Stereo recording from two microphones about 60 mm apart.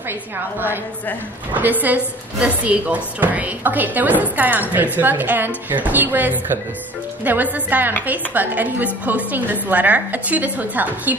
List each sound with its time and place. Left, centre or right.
1.5 s a woman's voice: right